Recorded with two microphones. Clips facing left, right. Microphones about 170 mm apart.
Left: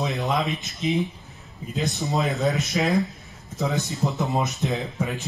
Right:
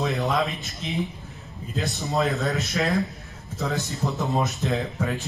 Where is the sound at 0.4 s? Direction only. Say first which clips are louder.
Left 1 dB; 20° left (ahead or behind).